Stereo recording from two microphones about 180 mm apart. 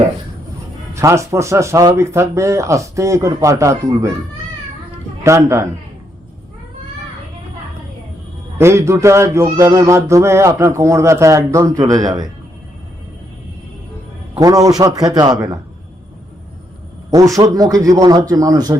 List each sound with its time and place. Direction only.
0.9 s speech: 15° right (ahead or behind)
5.2 s speech: 15° right (ahead or behind)
8.5 s speech: 15° right (ahead or behind)
14.3 s a man's voice: 20° right (ahead or behind)
17.1 s a man's voice: 20° right (ahead or behind)